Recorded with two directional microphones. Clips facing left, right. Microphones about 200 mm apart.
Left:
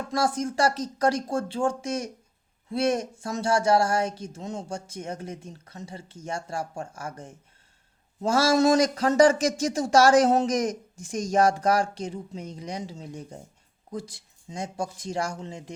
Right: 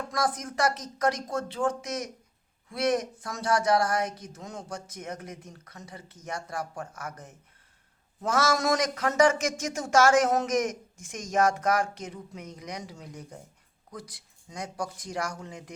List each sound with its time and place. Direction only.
0.1 s speech: 30° left (ahead or behind)